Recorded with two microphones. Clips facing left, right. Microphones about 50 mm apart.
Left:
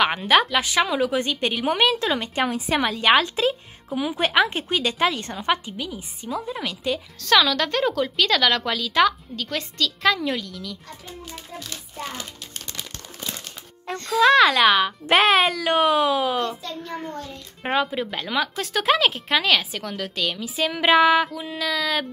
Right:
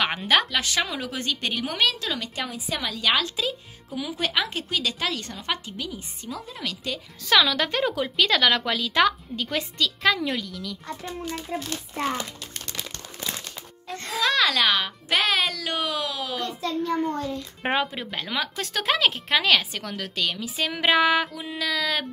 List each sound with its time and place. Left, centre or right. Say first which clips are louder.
0.0 s a woman's voice: left 4 dB; centre
1.7 s a woman's voice: left 6 dB; left
2.5 s a woman's voice: left 7 dB; left
2.9 s speech: left 5 dB; left
5.5 s a woman's voice: left 6 dB; centre
7.2 s a woman's voice: left 1 dB; centre
11.5 s a child's voice: right 7 dB; right
12.0 s a child's voice: right 6 dB; right
14.2 s speech: left 8 dB; left
14.5 s a woman's voice: left 5 dB; centre
15.0 s a woman's voice: left 6 dB; left
16.8 s a woman's voice: right 8 dB; centre